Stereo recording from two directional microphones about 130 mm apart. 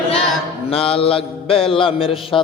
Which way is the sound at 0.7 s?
45° left (ahead or behind).